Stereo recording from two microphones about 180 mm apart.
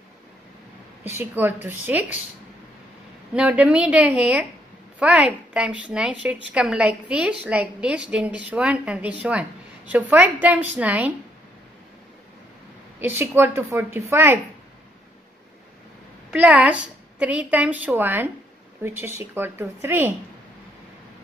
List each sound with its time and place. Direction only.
1.0 s a woman's voice: 10° right (ahead or behind)
3.3 s a woman's voice: 5° right (ahead or behind)
13.0 s a woman's voice: 10° right (ahead or behind)
16.3 s a woman's voice: 5° right (ahead or behind)